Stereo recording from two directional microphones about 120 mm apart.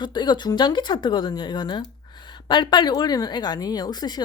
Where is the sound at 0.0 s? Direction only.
40° left (ahead or behind).